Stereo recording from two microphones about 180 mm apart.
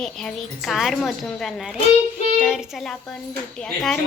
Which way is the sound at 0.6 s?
Centre (ahead or behind).